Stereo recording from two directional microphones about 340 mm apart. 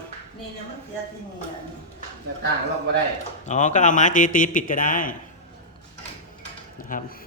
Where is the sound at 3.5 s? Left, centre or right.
Left.